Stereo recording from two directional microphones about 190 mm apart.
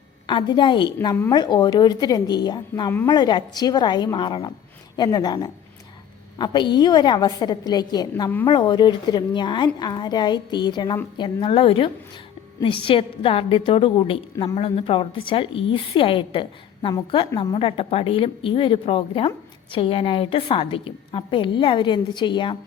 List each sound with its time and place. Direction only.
0.3 s a woman's voice: 25° left (ahead or behind)